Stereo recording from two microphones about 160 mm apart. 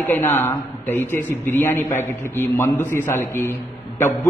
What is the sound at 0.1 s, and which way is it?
A man's voice, 15° left (ahead or behind).